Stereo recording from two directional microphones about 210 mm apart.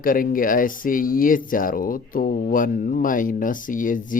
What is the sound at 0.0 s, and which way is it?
Speech, 40° left (ahead or behind).